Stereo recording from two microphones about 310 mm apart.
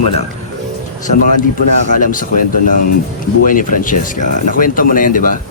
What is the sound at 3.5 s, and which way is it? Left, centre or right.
Speech, left.